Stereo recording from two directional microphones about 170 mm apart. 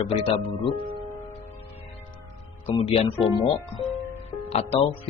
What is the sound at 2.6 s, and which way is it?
Speech, 35° left (ahead or behind).